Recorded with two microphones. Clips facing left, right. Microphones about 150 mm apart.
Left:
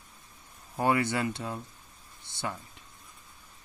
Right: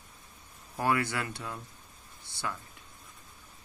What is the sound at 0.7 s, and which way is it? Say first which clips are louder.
Speech: left 3 dB; 25° left (ahead or behind).